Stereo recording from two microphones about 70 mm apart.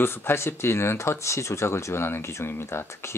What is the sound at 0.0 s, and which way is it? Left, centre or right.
Speech, left.